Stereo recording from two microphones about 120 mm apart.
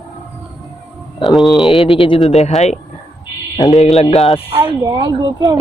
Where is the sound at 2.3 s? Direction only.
70° left (ahead or behind).